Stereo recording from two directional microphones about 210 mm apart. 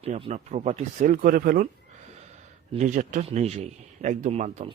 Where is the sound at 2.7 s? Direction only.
35° right (ahead or behind).